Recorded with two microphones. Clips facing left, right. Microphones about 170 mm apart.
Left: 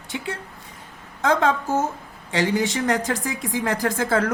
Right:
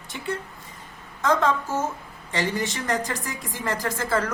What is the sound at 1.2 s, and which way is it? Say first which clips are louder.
Speech: left 2 dB; 65° left (ahead or behind).